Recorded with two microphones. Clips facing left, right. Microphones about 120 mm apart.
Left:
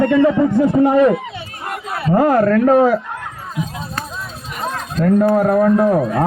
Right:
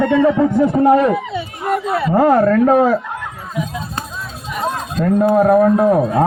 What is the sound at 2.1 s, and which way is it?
Speech, 10° right (ahead or behind).